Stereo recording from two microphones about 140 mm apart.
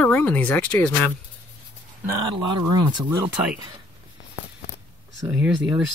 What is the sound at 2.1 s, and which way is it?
Speech, 30° right (ahead or behind).